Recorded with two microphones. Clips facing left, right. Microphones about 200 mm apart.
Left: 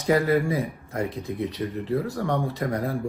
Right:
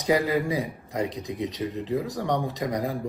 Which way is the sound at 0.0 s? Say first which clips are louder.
Left 2 dB; 15° right (ahead or behind).